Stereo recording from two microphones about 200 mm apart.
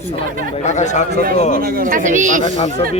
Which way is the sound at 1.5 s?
50° right (ahead or behind).